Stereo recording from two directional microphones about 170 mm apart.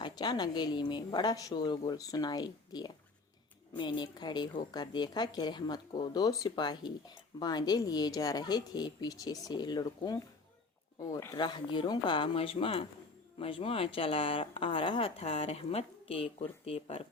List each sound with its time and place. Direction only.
0.0 s a woman's voice: 25° left (ahead or behind)